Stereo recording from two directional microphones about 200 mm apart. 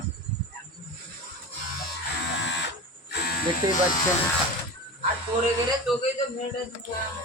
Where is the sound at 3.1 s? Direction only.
50° left (ahead or behind).